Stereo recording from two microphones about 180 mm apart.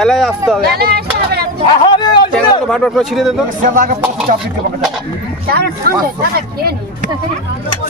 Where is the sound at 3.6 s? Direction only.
50° right (ahead or behind).